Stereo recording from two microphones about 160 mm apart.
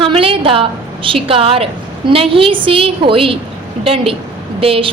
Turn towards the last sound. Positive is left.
turn(degrees=-35)  # may be behind; listen again after turning